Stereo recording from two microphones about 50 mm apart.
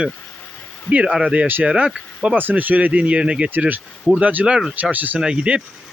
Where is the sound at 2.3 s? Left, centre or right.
Right.